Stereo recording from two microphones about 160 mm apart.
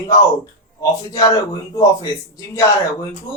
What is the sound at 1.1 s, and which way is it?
Speech, 20° left (ahead or behind).